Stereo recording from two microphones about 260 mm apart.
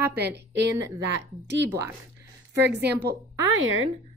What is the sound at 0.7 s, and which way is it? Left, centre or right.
Speech, centre.